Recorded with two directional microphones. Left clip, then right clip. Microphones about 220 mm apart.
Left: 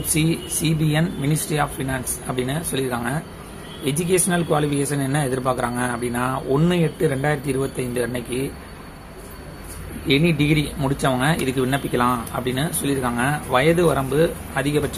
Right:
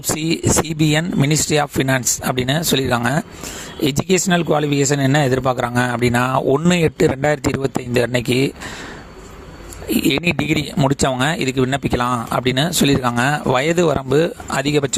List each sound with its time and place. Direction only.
0.2 s speech: 50° right (ahead or behind)
10.1 s speech: 50° right (ahead or behind)